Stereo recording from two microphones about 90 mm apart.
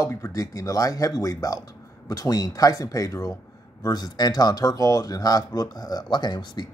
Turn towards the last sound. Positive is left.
turn(degrees=55)  # may be behind; listen again after turning